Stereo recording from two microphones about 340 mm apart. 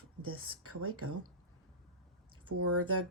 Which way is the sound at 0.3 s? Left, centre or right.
Right.